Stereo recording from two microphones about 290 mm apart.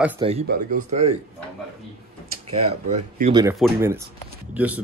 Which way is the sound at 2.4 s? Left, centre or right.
Right.